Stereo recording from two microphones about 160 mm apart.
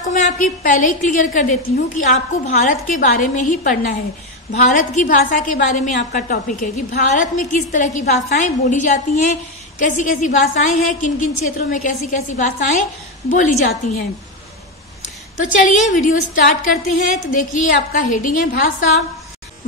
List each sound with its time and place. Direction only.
0.0 s a woman's voice: 55° left (ahead or behind)
15.4 s a woman's voice: 50° left (ahead or behind)